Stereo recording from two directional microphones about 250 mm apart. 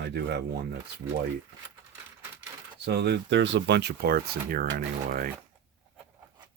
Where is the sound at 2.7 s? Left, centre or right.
Right.